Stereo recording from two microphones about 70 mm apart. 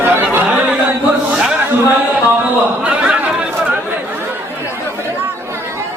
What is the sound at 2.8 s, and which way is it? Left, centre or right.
Chatter, centre.